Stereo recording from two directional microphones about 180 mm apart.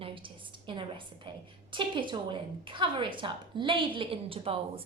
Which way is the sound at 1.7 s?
25° right (ahead or behind).